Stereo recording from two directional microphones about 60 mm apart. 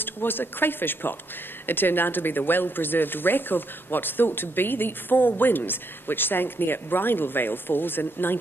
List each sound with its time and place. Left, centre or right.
0.0 s speech: left